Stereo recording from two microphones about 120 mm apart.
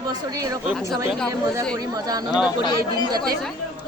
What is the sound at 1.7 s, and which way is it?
Speech, 30° right (ahead or behind).